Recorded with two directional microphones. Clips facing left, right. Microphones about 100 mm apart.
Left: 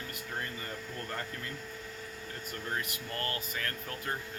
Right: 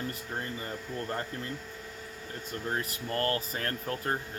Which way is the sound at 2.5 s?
30° right (ahead or behind).